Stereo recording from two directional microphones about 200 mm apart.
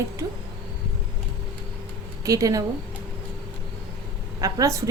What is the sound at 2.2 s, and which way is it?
Speech, 15° right (ahead or behind).